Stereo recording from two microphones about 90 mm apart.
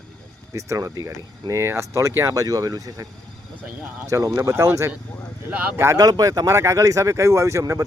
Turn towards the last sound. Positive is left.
turn(degrees=-35)  # may be behind; listen again after turning